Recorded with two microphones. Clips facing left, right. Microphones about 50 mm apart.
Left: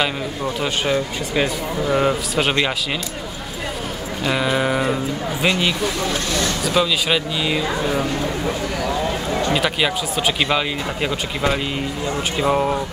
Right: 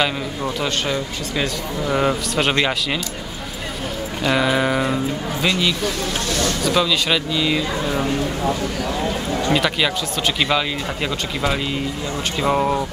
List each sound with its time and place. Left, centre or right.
0.9 s speech: centre
1.9 s a man's voice: centre
4.2 s a man's voice: centre
5.4 s speech: left
6.6 s speech: centre
8.8 s speech: left
9.5 s a man's voice: centre